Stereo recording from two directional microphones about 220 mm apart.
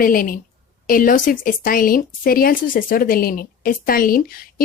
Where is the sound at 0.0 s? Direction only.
40° left (ahead or behind).